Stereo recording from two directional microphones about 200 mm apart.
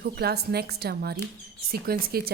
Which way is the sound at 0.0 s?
50° right (ahead or behind).